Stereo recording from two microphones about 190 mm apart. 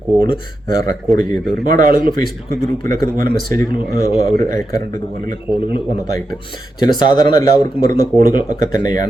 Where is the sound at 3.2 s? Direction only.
50° right (ahead or behind).